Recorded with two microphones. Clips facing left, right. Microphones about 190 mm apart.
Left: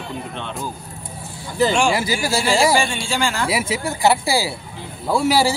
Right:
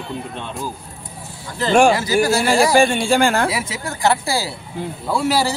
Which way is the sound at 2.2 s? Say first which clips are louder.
Right 2 dB; 55° right (ahead or behind).